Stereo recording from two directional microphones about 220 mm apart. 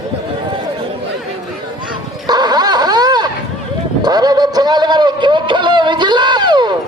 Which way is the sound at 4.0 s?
20° right (ahead or behind).